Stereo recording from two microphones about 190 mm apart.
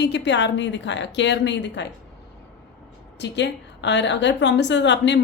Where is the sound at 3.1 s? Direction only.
65° left (ahead or behind).